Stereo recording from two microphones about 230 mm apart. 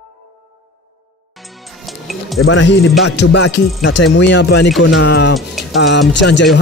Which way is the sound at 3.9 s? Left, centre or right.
Left.